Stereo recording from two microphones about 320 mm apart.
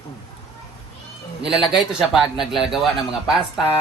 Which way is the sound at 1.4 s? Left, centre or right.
Centre.